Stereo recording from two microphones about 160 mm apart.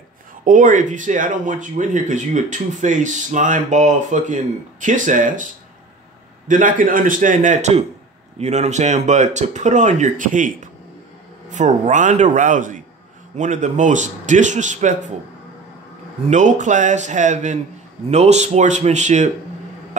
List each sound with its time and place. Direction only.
0.5 s a man's voice: 55° right (ahead or behind)
16.3 s speech: 50° right (ahead or behind)